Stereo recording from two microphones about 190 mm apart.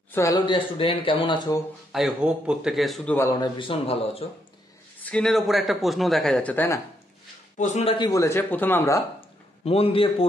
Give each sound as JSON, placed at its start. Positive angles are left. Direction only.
{"t": 0.1, "sound": "speech", "side_deg": 15}
{"t": 0.7, "sound": "a man's voice", "side_deg": 30}
{"t": 1.9, "sound": "speech", "side_deg": 0}
{"t": 3.2, "sound": "a man's voice", "side_deg": 20}
{"t": 5.0, "sound": "speech", "side_deg": 5}
{"t": 7.5, "sound": "speech", "side_deg": 40}
{"t": 8.0, "sound": "speech", "side_deg": 15}
{"t": 9.7, "sound": "a man's voice", "side_deg": 30}